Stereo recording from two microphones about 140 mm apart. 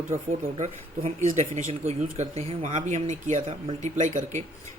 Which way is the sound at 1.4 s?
55° right (ahead or behind).